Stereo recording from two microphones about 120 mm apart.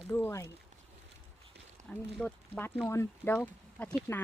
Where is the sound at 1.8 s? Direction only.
85° right.